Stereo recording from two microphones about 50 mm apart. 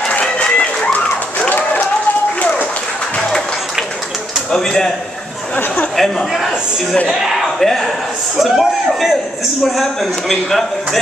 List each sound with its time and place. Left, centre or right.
0.2 s run: centre
4.5 s a man's voice: centre
5.9 s a man's voice: centre